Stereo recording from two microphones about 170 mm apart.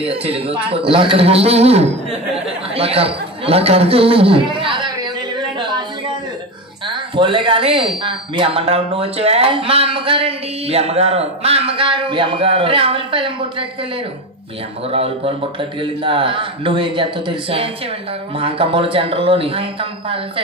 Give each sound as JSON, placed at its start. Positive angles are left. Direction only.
{"t": 0.1, "sound": "a man's voice", "side_deg": -35}
{"t": 5.6, "sound": "a sound", "side_deg": -25}
{"t": 6.9, "sound": "speech", "side_deg": -30}
{"t": 14.9, "sound": "speech", "side_deg": -35}